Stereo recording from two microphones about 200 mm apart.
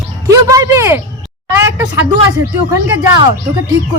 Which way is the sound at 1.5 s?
10° right (ahead or behind).